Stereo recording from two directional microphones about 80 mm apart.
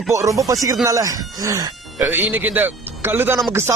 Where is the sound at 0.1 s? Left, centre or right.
Right.